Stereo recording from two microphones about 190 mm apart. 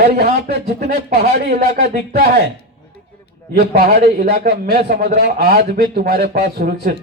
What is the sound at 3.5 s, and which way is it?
Speech, 50° right (ahead or behind).